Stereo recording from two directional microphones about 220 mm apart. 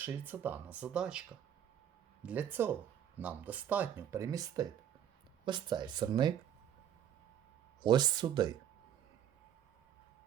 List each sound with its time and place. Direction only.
0.0 s speech: 10° right (ahead or behind)
2.2 s speech: 5° right (ahead or behind)
7.8 s speech: 20° right (ahead or behind)